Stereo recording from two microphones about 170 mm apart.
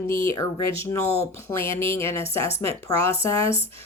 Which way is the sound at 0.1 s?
15° left (ahead or behind).